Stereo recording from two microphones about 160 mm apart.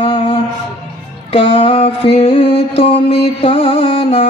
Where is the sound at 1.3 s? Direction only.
35° left (ahead or behind).